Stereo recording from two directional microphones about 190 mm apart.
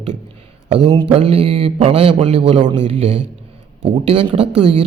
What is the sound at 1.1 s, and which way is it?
A man's voice, 30° right (ahead or behind).